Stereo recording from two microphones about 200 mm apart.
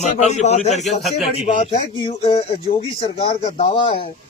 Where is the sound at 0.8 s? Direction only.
Centre (ahead or behind).